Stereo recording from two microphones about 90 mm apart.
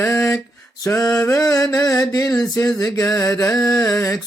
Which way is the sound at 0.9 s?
35° left (ahead or behind).